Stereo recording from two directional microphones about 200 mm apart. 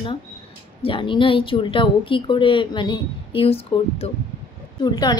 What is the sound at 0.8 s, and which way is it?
A woman's voice, 25° left (ahead or behind).